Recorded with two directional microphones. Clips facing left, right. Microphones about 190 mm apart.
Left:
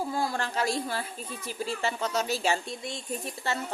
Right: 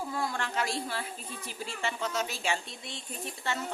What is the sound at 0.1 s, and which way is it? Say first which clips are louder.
A woman's voice: left 3 dB; 35° left (ahead or behind).